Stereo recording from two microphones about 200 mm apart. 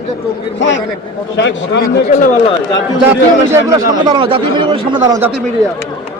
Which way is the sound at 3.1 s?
15° right (ahead or behind).